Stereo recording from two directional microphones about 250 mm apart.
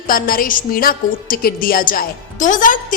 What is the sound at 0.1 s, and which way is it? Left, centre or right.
A woman's voice, left.